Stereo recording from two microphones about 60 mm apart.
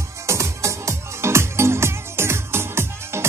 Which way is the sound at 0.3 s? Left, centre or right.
Right.